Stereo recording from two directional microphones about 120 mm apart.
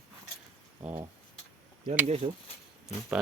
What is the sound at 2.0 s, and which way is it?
Speech, 60° right (ahead or behind).